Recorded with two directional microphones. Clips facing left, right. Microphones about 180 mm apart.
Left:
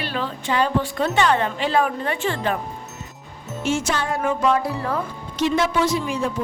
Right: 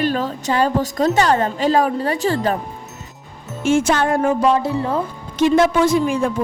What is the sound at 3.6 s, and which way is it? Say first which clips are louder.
Speech: right 7 dB; 50° right (ahead or behind).